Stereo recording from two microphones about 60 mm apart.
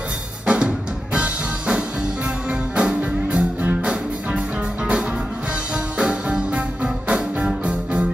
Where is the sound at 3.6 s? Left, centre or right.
Right.